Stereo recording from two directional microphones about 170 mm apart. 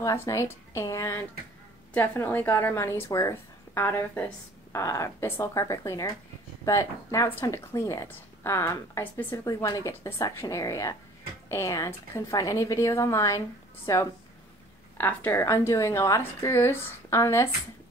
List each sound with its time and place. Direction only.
0.0 s a woman's voice: 15° left (ahead or behind)